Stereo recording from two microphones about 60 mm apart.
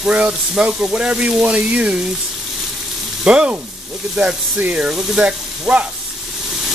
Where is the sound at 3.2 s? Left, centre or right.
Centre.